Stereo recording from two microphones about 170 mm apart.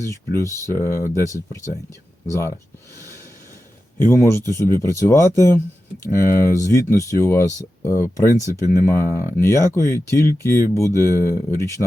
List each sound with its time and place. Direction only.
0.1 s speech: 15° left (ahead or behind)
3.9 s speech: 15° left (ahead or behind)